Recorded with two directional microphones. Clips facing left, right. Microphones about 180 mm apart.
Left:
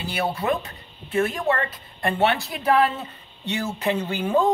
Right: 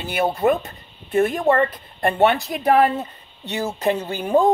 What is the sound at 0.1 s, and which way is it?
Speech, 50° right (ahead or behind).